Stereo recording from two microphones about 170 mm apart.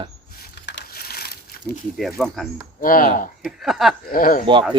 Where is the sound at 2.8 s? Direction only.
55° left (ahead or behind).